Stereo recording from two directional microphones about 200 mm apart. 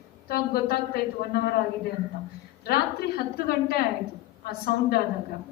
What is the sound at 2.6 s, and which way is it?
A man's voice, 50° left (ahead or behind).